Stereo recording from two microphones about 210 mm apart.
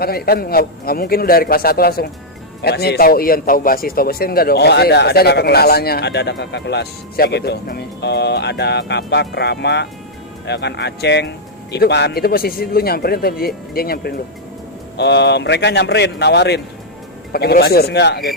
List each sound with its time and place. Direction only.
0.0 s a man's voice: 45° left (ahead or behind)